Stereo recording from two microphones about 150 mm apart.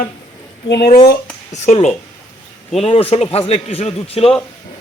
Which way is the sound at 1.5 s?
50° left (ahead or behind).